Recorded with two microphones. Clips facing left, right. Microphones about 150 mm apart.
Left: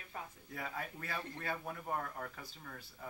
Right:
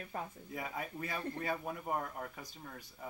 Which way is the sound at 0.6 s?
15° right (ahead or behind).